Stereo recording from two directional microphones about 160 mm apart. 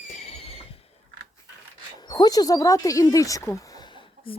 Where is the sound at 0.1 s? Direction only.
40° left (ahead or behind).